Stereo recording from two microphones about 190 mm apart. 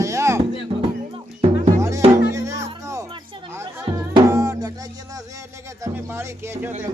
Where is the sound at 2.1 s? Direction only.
15° right (ahead or behind).